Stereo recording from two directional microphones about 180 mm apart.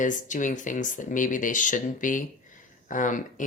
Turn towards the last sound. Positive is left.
turn(degrees=45)  # may be behind; listen again after turning